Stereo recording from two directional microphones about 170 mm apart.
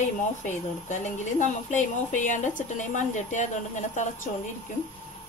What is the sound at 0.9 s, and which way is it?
A woman's voice, 45° left (ahead or behind).